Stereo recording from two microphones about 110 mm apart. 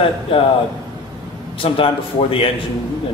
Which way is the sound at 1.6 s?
55° left (ahead or behind).